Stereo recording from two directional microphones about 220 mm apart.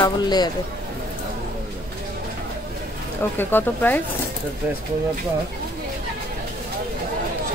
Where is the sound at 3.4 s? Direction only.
10° left (ahead or behind).